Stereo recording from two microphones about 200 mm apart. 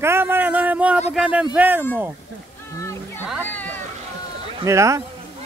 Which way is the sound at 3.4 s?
10° left (ahead or behind).